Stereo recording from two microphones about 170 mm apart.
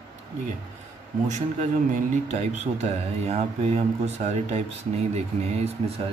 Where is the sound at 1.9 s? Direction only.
45° right (ahead or behind).